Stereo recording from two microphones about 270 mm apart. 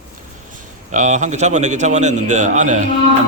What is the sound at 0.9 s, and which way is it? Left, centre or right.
A man's voice, right.